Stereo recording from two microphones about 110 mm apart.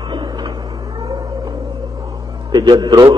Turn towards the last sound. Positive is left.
turn(degrees=-40)  # may be behind; listen again after turning